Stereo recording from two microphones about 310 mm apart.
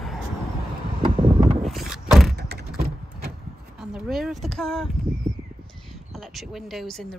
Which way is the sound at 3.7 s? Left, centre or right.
Centre.